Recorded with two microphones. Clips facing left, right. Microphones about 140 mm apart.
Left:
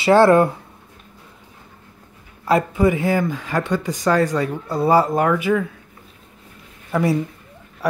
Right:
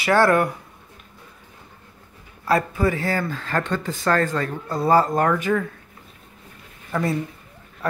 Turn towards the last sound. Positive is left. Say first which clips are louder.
# left 4 dB
turn(degrees=10)  # may be behind; listen again after turning